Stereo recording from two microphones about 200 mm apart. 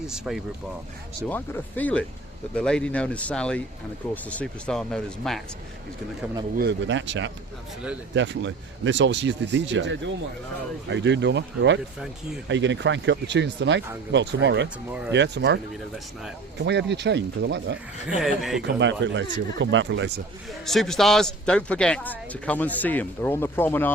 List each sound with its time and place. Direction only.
0.1 s speech: centre (ahead or behind)
1.3 s a man's voice: 10° left (ahead or behind)
6.6 s speech: 60° right (ahead or behind)
18.2 s speech: centre (ahead or behind)
18.6 s speech: 65° right (ahead or behind)
20.5 s a man's voice: centre (ahead or behind)